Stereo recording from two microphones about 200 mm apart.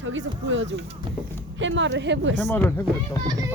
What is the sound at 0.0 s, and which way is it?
A woman's voice, 70° right (ahead or behind).